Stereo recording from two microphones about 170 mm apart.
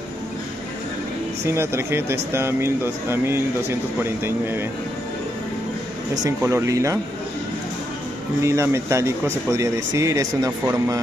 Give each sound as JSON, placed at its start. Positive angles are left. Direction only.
{"t": 1.4, "sound": "speech", "side_deg": -15}
{"t": 6.2, "sound": "speech", "side_deg": -15}
{"t": 8.4, "sound": "speech", "side_deg": -15}